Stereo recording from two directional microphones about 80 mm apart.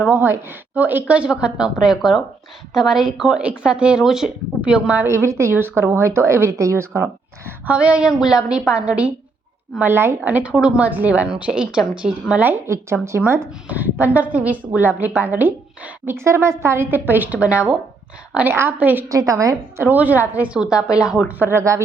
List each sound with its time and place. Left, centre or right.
0.1 s a woman's voice: right
5.0 s a woman's voice: right
7.6 s a woman's voice: centre
9.8 s a woman's voice: right
10.2 s a woman's voice: centre
12.6 s a woman's voice: right
13.7 s a woman's voice: right
18.3 s a woman's voice: right
19.0 s a woman's voice: right
19.8 s a woman's voice: right
20.8 s a woman's voice: left
21.3 s a woman's voice: right